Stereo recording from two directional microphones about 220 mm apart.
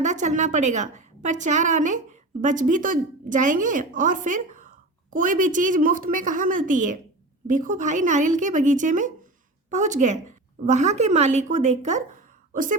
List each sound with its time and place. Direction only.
0.0 s a woman's voice: 35° right (ahead or behind)